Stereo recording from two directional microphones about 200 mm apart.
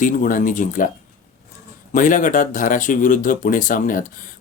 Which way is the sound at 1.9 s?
40° left (ahead or behind).